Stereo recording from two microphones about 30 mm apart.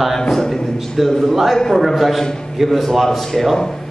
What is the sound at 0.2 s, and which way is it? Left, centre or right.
Speech, centre.